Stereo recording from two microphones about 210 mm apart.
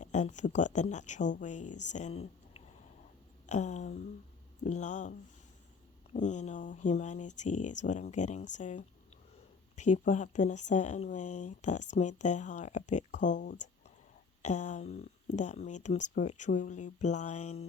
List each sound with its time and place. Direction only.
0.0 s speech: 35° left (ahead or behind)
3.4 s a sound: 35° left (ahead or behind)
4.6 s speech: 35° left (ahead or behind)
6.1 s speech: 35° left (ahead or behind)